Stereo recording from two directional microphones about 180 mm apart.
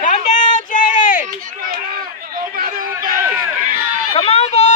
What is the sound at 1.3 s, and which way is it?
Run, 50° right (ahead or behind).